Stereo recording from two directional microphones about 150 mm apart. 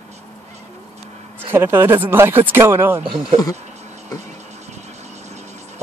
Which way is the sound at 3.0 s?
35° right (ahead or behind).